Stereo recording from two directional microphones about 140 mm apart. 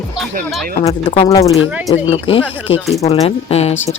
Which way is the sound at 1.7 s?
10° right (ahead or behind).